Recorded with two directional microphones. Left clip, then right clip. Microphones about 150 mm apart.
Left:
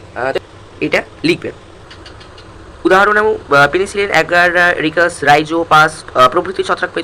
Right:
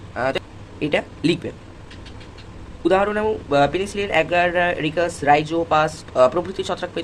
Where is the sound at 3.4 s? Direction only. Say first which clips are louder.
Left 8 dB; 15° right (ahead or behind).